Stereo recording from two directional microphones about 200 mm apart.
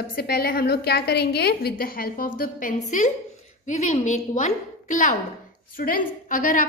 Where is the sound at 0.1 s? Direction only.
50° left (ahead or behind).